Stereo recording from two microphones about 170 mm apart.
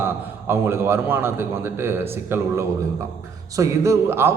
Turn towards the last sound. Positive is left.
turn(degrees=-15)  # may be behind; listen again after turning